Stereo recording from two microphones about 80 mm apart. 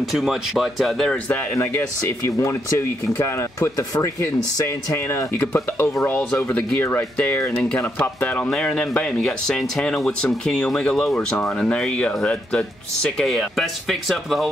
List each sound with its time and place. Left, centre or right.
0.0 s speech: centre
1.0 s speech: centre
1.5 s speech: left; by 13.3 s centre
13.3 s speech: centre